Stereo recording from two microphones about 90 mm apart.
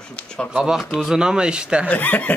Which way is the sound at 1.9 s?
20° left (ahead or behind).